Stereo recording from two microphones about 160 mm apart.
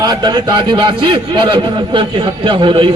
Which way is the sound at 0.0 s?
25° right (ahead or behind).